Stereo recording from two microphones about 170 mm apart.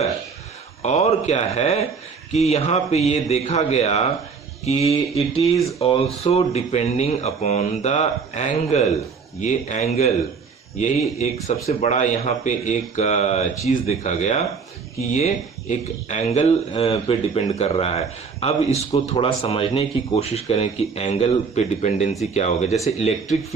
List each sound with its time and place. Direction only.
0.8 s speech: 40° left (ahead or behind)
16.0 s speech: 45° left (ahead or behind)